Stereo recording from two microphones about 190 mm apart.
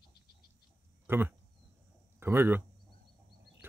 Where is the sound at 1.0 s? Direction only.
10° right (ahead or behind).